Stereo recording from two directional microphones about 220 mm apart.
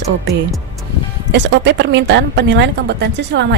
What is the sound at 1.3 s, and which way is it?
A woman's voice, 50° right (ahead or behind).